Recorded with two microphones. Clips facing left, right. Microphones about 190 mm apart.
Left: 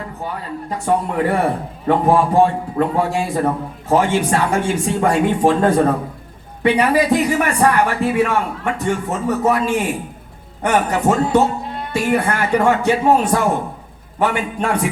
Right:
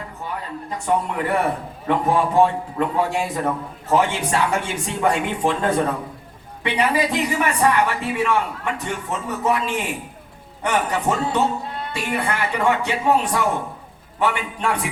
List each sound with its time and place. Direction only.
0.9 s a man's voice: 40° left (ahead or behind)